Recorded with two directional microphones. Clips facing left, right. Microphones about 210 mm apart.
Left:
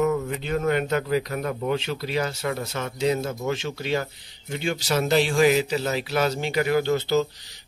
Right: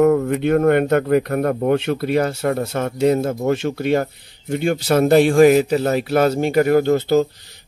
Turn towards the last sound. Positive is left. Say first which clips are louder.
# right 6 dB
turn(degrees=-50)  # may be behind; listen again after turning